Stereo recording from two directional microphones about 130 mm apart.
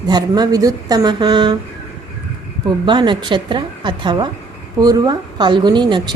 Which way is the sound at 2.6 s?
35° right (ahead or behind).